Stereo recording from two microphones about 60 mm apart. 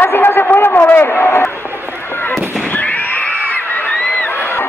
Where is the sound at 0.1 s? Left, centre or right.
Left.